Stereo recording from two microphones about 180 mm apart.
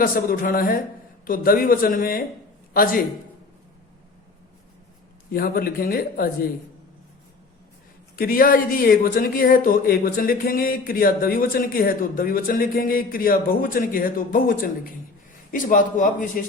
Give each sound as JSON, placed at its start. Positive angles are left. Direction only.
{"t": 0.0, "sound": "speech", "side_deg": 50}
{"t": 5.3, "sound": "speech", "side_deg": 55}
{"t": 8.1, "sound": "speech", "side_deg": 55}